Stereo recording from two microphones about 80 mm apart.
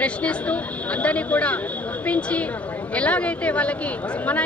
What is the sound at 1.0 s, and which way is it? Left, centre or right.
Speech, centre.